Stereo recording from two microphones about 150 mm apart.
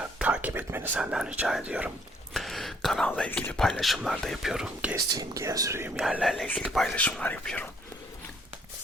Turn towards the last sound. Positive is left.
turn(degrees=10)  # may be behind; listen again after turning